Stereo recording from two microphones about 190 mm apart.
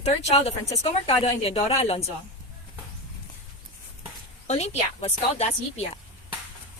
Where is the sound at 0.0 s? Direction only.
30° left (ahead or behind).